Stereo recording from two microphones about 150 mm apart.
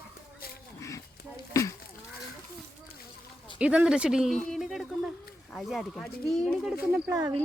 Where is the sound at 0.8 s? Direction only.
20° left (ahead or behind).